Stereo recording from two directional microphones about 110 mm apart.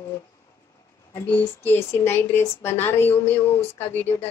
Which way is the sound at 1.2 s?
20° left (ahead or behind).